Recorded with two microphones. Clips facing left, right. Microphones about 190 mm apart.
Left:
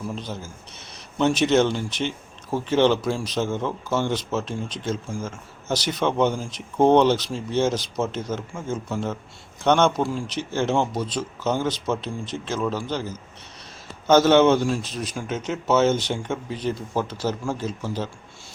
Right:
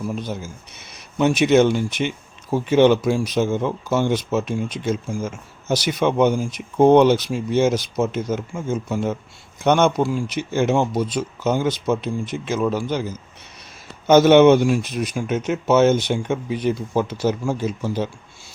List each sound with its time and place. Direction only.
0.2 s speech: 15° right (ahead or behind)